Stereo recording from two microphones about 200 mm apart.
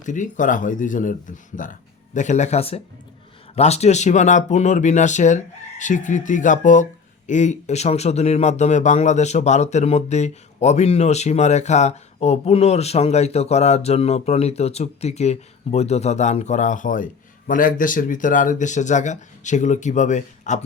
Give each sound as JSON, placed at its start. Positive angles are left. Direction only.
{"t": 0.0, "sound": "speech", "side_deg": 40}